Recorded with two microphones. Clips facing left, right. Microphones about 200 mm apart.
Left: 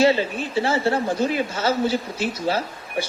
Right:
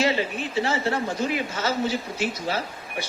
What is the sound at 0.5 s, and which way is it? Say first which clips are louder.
A woman's voice: left 4 dB; 30° left (ahead or behind).